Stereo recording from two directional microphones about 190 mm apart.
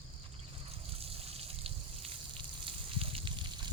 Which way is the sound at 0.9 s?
30° right (ahead or behind).